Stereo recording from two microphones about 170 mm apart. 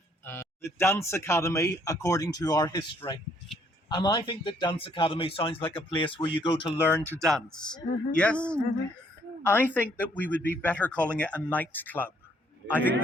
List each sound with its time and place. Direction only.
0.3 s speech: 15° left (ahead or behind)
7.3 s a man's voice: 5° left (ahead or behind)